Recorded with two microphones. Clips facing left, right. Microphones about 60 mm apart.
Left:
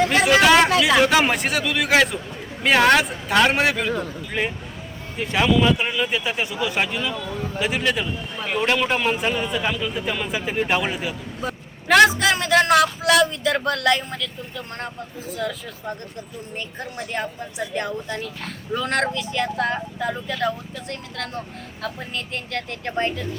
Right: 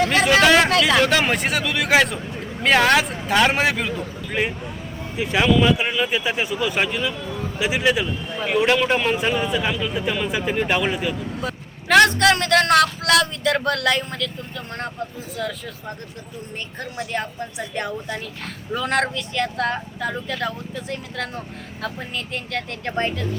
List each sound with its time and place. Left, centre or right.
0.1 s a man's voice: centre
15.4 s a man's voice: centre
17.0 s a man's voice: centre